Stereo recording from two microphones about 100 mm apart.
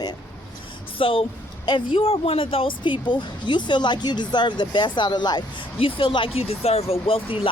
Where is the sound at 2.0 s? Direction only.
70° left (ahead or behind); by 5.4 s 45° left (ahead or behind).